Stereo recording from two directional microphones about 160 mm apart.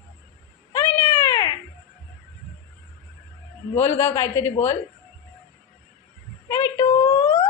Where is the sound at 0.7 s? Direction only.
20° left (ahead or behind).